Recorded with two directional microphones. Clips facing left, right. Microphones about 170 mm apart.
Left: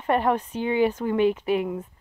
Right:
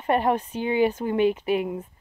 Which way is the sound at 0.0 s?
20° right (ahead or behind).